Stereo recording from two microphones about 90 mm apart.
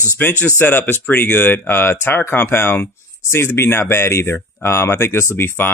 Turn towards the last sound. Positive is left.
turn(degrees=25)  # may be behind; listen again after turning